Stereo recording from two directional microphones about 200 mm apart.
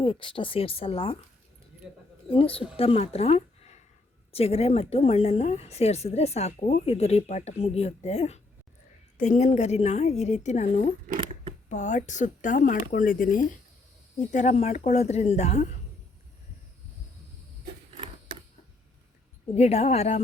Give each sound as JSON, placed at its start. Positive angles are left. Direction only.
{"t": 0.0, "sound": "a woman's voice", "side_deg": 25}
{"t": 2.3, "sound": "a woman's voice", "side_deg": 30}
{"t": 19.5, "sound": "a woman's voice", "side_deg": 35}